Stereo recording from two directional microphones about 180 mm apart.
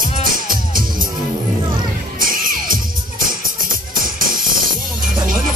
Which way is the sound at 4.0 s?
50° right (ahead or behind).